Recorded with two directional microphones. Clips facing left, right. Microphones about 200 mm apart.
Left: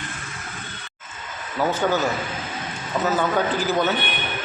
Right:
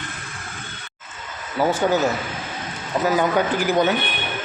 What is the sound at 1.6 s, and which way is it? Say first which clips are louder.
Speech: right 2 dB; 10° right (ahead or behind).